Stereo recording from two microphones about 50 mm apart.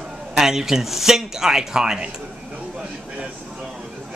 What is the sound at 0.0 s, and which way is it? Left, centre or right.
Speech, centre.